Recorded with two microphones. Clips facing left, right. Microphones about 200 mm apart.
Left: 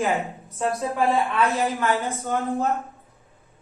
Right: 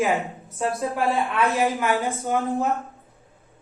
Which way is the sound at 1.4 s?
15° right (ahead or behind).